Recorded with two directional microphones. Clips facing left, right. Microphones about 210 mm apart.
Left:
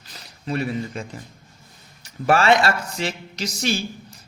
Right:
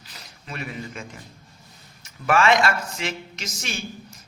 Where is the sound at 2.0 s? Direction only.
35° left (ahead or behind).